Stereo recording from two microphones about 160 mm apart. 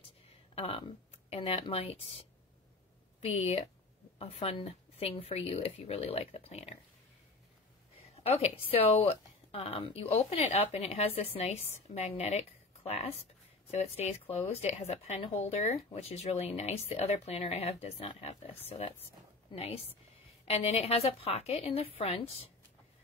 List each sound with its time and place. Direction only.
0.6 s speech: 35° left (ahead or behind)
3.3 s speech: 40° left (ahead or behind)
8.0 s speech: 40° left (ahead or behind)